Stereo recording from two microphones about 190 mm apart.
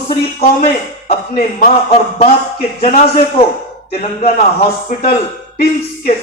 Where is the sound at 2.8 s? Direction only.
30° left (ahead or behind).